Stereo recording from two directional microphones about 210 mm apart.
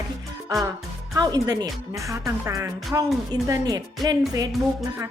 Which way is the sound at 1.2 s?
15° right (ahead or behind).